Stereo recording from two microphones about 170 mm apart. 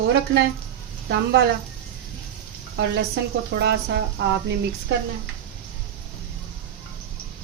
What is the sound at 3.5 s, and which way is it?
Speech, 75° right (ahead or behind).